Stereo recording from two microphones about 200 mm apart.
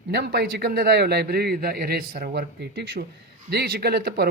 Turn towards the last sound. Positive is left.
turn(degrees=-50)  # may be behind; listen again after turning